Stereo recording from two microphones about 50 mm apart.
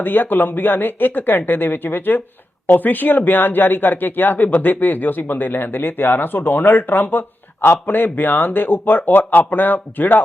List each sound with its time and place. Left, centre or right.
0.0 s speech: left